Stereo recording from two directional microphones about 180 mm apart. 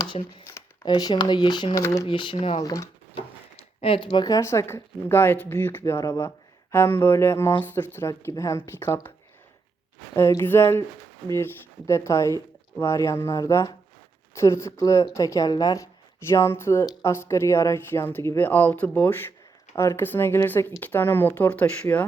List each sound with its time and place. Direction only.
0.0 s speech: 25° left (ahead or behind)
2.0 s speech: 25° left (ahead or behind)
2.6 s speech: 20° left (ahead or behind)
3.8 s speech: 30° left (ahead or behind); by 9.1 s 15° left (ahead or behind)
10.2 s speech: 15° left (ahead or behind)